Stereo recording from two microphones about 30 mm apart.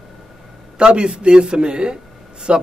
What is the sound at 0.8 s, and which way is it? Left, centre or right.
A man's voice, right.